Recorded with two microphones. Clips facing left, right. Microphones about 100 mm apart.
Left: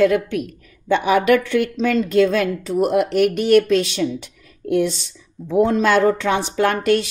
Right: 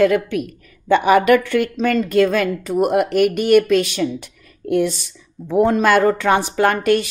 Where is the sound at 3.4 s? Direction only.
55° right (ahead or behind).